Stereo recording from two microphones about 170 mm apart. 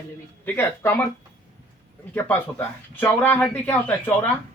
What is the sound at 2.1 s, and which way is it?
Speech, 10° left (ahead or behind).